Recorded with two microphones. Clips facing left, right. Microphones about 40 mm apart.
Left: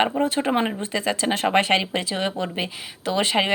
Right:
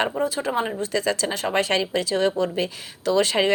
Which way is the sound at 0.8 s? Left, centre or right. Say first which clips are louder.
Right 1 dB; left.